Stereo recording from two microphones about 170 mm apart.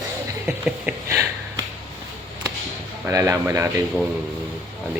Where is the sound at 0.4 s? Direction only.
5° right (ahead or behind).